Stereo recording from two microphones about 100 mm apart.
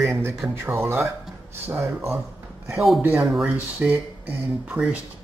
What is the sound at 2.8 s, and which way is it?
Speech, centre (ahead or behind).